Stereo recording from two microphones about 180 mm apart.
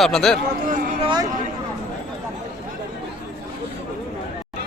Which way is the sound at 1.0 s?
25° right (ahead or behind).